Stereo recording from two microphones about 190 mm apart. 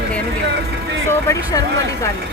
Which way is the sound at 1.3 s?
15° left (ahead or behind).